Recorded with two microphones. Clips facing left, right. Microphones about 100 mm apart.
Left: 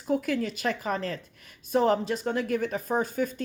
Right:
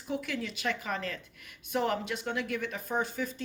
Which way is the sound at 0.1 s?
40° left (ahead or behind).